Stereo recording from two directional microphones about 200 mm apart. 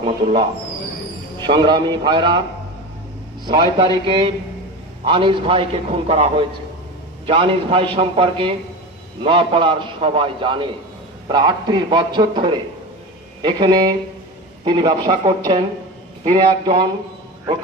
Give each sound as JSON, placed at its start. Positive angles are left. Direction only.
{"t": 0.0, "sound": "a man's voice", "side_deg": -25}
{"t": 3.4, "sound": "a man's voice", "side_deg": -25}